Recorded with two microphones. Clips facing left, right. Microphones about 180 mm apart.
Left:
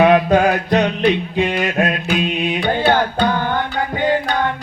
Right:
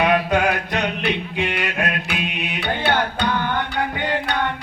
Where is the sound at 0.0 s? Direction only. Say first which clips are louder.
Left 6 dB; 40° left (ahead or behind).